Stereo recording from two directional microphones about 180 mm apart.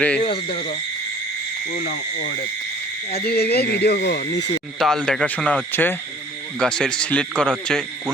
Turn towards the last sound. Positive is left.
turn(degrees=5)  # may be behind; listen again after turning